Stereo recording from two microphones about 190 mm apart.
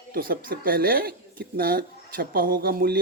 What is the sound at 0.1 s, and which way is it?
Speech, 50° right (ahead or behind).